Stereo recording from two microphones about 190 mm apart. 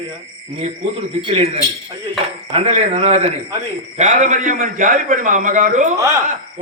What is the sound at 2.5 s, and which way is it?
A man's voice, 35° right (ahead or behind).